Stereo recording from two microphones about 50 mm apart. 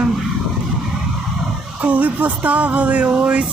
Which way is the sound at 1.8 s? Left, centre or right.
Right.